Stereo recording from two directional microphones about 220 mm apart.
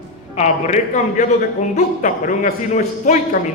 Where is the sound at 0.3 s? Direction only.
30° left (ahead or behind).